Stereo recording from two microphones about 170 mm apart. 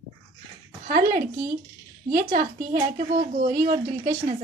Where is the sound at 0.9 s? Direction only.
60° right (ahead or behind).